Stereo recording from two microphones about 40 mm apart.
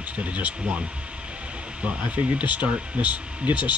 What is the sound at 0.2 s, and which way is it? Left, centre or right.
Speech, right.